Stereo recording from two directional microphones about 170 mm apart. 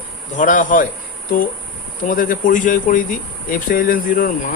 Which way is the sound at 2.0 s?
55° left (ahead or behind).